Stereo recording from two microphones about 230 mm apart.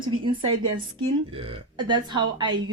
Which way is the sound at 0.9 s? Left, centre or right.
Right.